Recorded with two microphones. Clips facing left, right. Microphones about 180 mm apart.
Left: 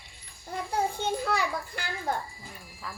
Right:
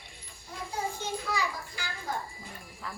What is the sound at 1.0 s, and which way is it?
Children playing, 60° left (ahead or behind).